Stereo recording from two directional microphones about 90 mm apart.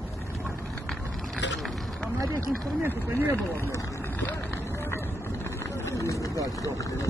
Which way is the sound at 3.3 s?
25° left (ahead or behind).